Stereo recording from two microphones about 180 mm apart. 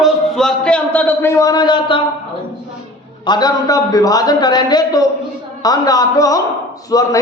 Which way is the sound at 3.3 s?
20° left (ahead or behind).